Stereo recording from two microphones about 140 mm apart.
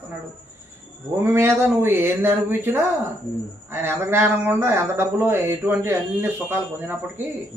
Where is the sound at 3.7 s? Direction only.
15° right (ahead or behind).